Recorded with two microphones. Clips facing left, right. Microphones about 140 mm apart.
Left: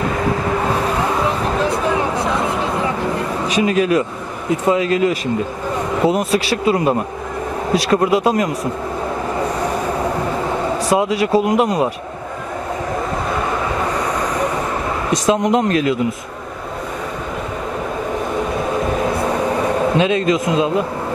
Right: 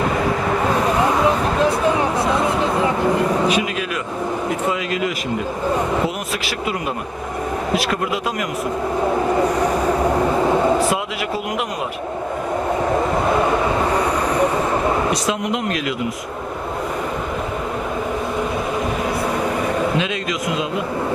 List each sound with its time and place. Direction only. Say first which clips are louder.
3.4 s speech: left 4 dB; 35° left (ahead or behind)
7.9 s speech: left 8 dB; 35° left (ahead or behind)
10.9 s speech: left 7 dB; 35° left (ahead or behind)
15.2 s speech: left 6 dB; 35° left (ahead or behind)
20.0 s speech: left 7 dB; 35° left (ahead or behind)